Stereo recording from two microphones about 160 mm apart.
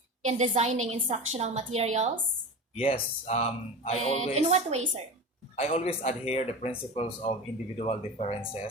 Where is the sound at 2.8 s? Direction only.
40° left (ahead or behind).